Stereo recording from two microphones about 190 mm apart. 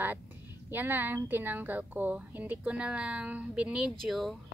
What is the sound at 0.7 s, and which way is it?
Speech, 10° right (ahead or behind).